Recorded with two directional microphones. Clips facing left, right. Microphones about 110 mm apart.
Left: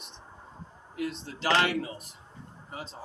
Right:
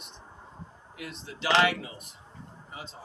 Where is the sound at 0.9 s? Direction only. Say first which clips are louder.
Left 7 dB; 40° left (ahead or behind).